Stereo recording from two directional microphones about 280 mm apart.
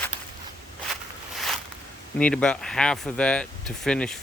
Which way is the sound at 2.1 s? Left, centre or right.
Centre.